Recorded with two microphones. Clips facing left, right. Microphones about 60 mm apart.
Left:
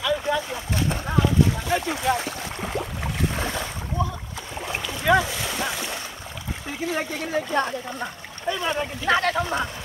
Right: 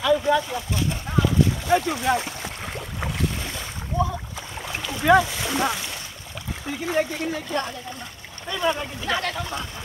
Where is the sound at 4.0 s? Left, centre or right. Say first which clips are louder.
Right 4 dB; centre.